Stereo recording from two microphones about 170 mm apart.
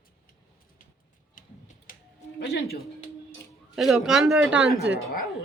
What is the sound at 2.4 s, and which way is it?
Speech, 70° left (ahead or behind).